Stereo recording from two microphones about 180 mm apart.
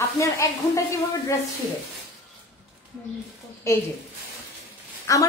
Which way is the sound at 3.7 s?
15° left (ahead or behind).